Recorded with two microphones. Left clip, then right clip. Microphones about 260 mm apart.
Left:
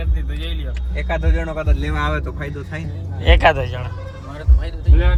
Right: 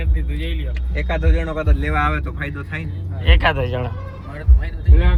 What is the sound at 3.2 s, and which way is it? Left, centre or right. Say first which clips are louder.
Speech: left 4 dB; centre.